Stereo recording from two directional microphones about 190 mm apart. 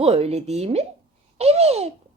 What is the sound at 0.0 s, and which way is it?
A woman's voice, 30° right (ahead or behind).